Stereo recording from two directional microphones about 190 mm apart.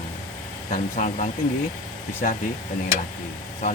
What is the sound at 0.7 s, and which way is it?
Speech, 40° left (ahead or behind).